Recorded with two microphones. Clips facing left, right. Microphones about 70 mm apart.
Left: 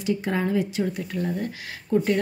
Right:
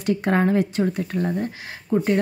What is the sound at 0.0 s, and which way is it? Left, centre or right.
Speech, right.